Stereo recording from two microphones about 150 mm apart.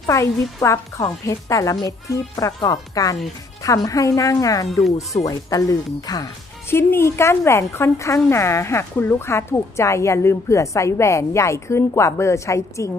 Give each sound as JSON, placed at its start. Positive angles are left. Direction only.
{"t": 0.0, "sound": "a woman's voice", "side_deg": 20}